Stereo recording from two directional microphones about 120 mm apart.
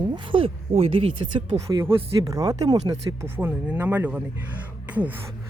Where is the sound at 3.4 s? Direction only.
15° right (ahead or behind).